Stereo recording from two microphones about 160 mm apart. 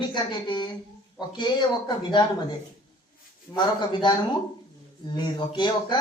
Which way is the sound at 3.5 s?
25° left (ahead or behind).